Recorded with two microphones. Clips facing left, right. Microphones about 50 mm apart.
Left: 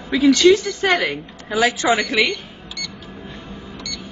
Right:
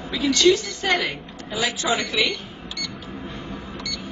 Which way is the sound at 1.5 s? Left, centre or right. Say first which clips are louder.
Left 7 dB; left.